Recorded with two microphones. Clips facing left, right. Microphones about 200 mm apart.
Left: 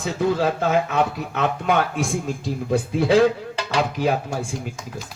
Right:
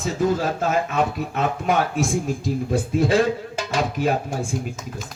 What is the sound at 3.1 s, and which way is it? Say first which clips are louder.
Music: left 3 dB; 50° right (ahead or behind).